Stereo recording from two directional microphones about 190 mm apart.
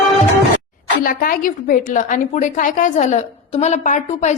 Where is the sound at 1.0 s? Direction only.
50° left (ahead or behind).